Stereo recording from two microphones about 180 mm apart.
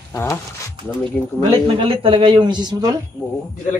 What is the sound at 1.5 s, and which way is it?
Speech, 30° right (ahead or behind).